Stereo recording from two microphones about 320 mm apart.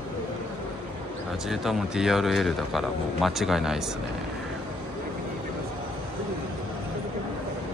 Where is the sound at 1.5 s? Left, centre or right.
Centre.